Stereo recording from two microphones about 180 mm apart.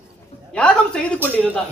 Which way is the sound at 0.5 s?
5° left (ahead or behind).